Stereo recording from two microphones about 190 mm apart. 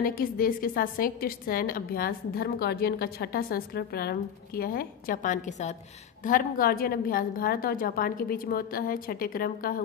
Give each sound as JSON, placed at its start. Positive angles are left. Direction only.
{"t": 0.0, "sound": "a woman's voice", "side_deg": 50}